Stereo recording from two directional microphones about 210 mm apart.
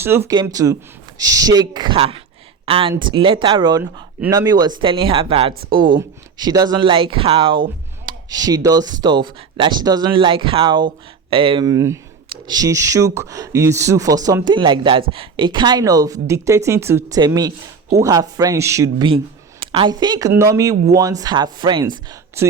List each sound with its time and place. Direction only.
0.0 s speech: 10° right (ahead or behind)